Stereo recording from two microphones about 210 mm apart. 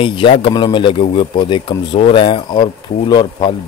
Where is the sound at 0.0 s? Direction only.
25° left (ahead or behind).